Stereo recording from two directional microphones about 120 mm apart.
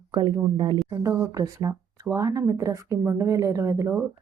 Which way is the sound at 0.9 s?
25° right (ahead or behind).